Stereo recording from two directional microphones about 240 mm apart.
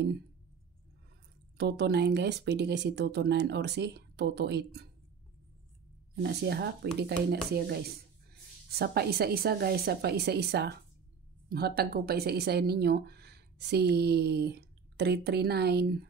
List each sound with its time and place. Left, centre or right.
1.6 s speech: right
6.2 s speech: right